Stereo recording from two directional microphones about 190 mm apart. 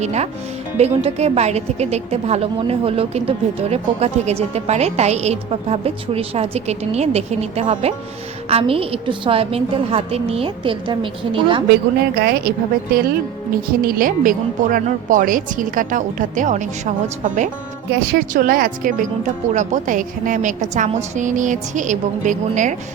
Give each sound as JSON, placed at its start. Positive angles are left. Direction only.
{"t": 0.0, "sound": "a woman's voice", "side_deg": -35}
{"t": 12.1, "sound": "a woman's voice", "side_deg": -55}